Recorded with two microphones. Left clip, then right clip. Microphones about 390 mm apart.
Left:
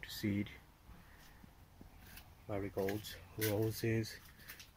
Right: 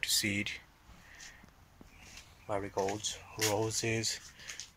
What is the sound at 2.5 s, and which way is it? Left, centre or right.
Speech, right.